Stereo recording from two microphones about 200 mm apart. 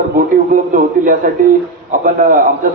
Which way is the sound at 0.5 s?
40° right (ahead or behind).